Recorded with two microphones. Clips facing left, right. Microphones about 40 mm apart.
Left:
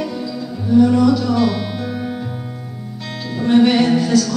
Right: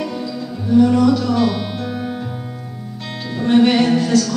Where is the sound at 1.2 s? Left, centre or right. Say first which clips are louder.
Even; centre.